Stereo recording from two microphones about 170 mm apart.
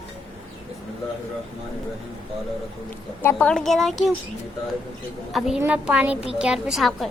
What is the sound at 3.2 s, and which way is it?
Speech, 5° left (ahead or behind).